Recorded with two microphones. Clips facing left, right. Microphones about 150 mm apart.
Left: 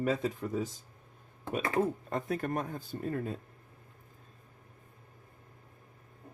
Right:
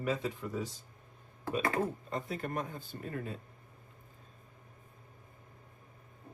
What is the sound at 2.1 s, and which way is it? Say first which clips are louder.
Speech: left 4 dB; 50° left (ahead or behind).